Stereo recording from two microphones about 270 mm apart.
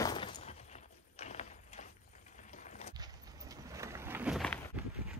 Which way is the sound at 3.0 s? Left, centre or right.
Centre.